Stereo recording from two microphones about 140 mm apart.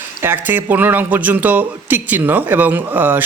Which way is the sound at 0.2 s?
15° right (ahead or behind).